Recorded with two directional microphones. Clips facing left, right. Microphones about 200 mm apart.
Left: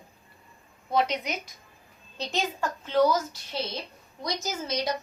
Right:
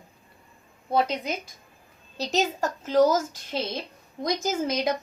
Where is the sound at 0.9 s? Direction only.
30° right (ahead or behind).